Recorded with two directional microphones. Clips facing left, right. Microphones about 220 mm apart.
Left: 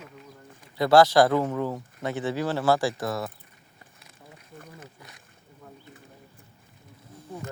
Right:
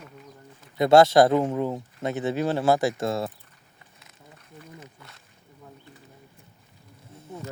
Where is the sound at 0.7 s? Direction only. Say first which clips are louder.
Right 2 dB; 25° right (ahead or behind).